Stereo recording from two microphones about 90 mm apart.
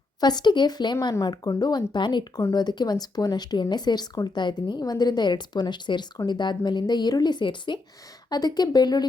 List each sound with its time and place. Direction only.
0.2 s speech: 50° left (ahead or behind)
1.1 s speech: 45° left (ahead or behind); by 7.8 s 60° left (ahead or behind)
8.3 s speech: 50° left (ahead or behind)